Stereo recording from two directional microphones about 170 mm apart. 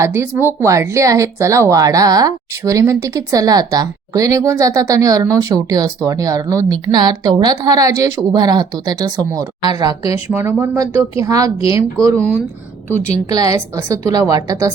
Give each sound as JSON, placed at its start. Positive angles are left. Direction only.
{"t": 0.0, "sound": "speech", "side_deg": -15}
{"t": 13.3, "sound": "speech", "side_deg": -20}